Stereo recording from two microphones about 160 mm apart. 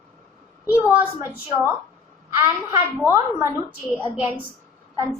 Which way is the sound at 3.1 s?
15° right (ahead or behind).